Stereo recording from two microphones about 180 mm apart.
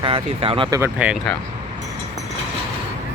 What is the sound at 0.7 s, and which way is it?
Speech, 15° right (ahead or behind).